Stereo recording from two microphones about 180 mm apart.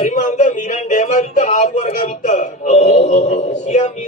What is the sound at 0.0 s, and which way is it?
A man's voice, 40° left (ahead or behind).